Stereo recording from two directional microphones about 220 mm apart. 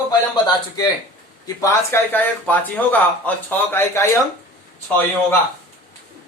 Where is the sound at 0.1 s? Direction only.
15° left (ahead or behind).